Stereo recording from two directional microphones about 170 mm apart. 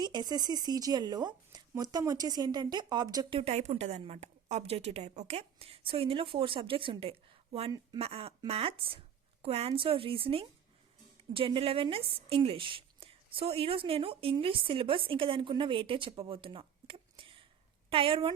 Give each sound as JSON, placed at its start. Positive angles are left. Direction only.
{"t": 0.0, "sound": "speech", "side_deg": -25}
{"t": 3.5, "sound": "a woman's voice", "side_deg": -40}